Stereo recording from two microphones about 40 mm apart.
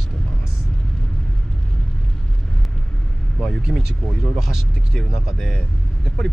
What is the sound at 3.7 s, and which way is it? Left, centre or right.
Speech, centre.